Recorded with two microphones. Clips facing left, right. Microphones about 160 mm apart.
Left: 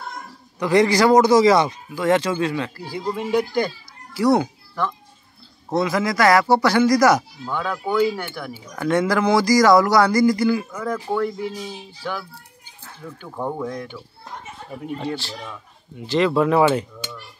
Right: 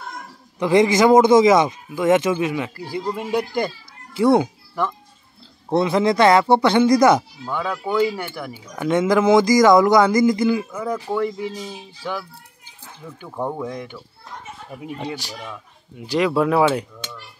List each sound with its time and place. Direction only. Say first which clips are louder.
0.6 s speech: right 1 dB; 20° right (ahead or behind)
3.2 s speech: left 3 dB; 5° right (ahead or behind)
4.1 s a child's voice: right 2 dB; 20° right (ahead or behind)
5.7 s speech: right 3 dB; 30° right (ahead or behind)
7.4 s speech: even; 5° right (ahead or behind)
12.8 s speech: left 1 dB; 10° right (ahead or behind)
14.9 s speech: left 2 dB; 10° right (ahead or behind)